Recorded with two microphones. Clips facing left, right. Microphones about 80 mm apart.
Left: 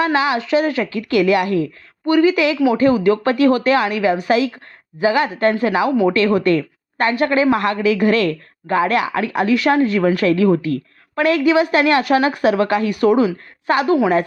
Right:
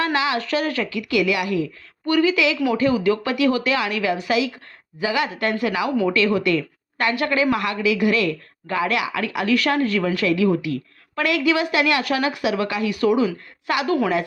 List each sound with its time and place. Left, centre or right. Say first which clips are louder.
0.0 s a woman's voice: left 4 dB; left